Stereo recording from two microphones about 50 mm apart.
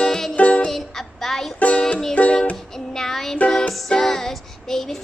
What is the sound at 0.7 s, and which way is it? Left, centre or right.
Child singing, centre.